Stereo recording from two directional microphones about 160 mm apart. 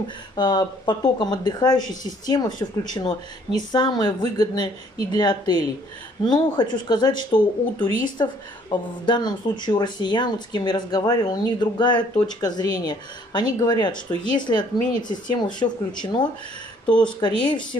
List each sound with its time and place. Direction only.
0.4 s speech: 25° left (ahead or behind)